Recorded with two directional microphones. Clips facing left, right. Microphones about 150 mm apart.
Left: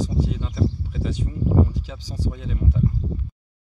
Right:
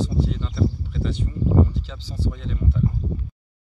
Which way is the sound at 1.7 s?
10° left (ahead or behind).